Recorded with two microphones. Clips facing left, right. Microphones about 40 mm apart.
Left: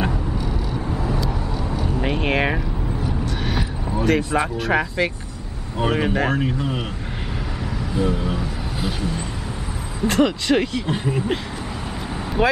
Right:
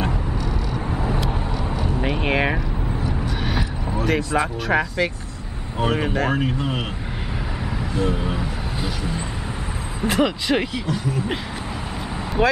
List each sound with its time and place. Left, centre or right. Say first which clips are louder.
0.9 s vehicle: right 1 dB; right
2.0 s a sound: left 1 dB; centre
3.4 s vehicle: even; centre
4.4 s speech: even; centre
6.3 s speech: even; centre
8.0 s speech: left 1 dB; centre
10.0 s speech: left 2 dB; centre
10.9 s speech: left 1 dB; left
12.4 s speech: even; centre